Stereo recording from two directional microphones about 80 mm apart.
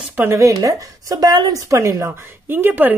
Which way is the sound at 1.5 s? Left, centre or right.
Right.